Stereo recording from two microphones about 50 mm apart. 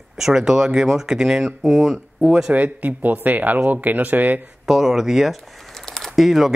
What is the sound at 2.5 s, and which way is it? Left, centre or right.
Speech, right.